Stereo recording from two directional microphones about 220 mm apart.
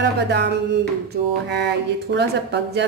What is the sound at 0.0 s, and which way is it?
Speech, 50° right (ahead or behind).